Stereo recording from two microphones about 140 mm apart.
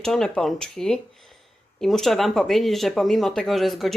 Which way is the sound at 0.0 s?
5° left (ahead or behind).